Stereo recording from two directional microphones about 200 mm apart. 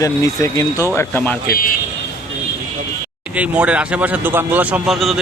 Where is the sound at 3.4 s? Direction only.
5° right (ahead or behind).